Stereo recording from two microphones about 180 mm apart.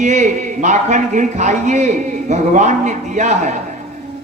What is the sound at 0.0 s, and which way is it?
Speech, 40° right (ahead or behind).